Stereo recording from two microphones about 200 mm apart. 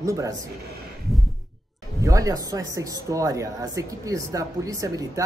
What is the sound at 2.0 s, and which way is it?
Speech, 15° right (ahead or behind).